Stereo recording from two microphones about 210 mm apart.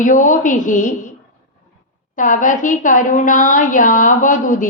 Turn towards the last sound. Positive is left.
turn(degrees=40)  # may be behind; listen again after turning